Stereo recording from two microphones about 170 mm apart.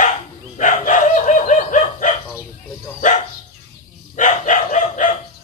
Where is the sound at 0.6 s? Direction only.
50° left (ahead or behind).